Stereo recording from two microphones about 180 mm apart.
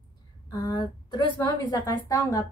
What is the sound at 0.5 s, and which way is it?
A woman's voice, 25° left (ahead or behind).